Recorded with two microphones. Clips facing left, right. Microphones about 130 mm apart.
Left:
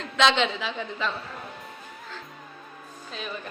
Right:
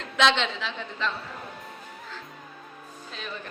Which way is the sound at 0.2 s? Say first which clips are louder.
Left 1 dB; 5° left (ahead or behind).